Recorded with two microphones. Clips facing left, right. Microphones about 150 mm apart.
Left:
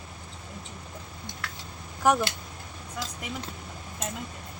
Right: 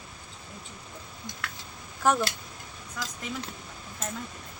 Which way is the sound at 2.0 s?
15° left (ahead or behind).